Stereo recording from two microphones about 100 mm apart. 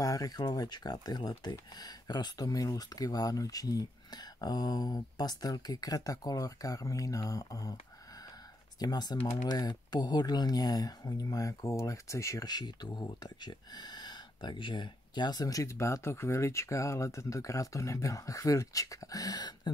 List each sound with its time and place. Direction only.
0.0 s speech: 35° left (ahead or behind)
8.7 s speech: 40° left (ahead or behind)
12.4 s speech: 45° left (ahead or behind)